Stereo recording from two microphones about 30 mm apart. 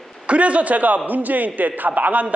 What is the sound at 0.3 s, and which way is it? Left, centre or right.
A man's voice, right.